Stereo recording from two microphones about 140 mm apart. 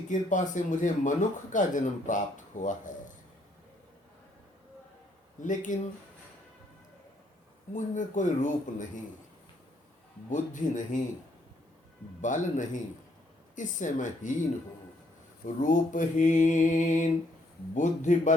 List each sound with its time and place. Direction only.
0.1 s mantra: 65° left (ahead or behind)
5.4 s mantra: 65° left (ahead or behind)
7.7 s mantra: 60° left (ahead or behind)
10.2 s mantra: 65° left (ahead or behind)
12.2 s mantra: 65° left (ahead or behind)
15.6 s mantra: 65° left (ahead or behind)